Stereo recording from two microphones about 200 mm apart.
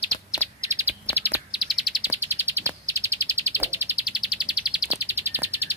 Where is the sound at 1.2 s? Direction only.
5° right (ahead or behind).